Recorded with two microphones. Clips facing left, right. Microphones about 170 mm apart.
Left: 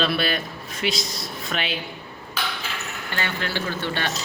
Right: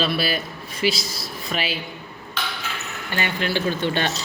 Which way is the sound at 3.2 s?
15° right (ahead or behind).